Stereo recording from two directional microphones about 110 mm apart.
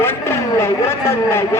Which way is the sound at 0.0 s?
25° left (ahead or behind).